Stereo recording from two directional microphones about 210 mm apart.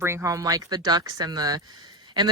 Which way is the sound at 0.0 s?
15° right (ahead or behind).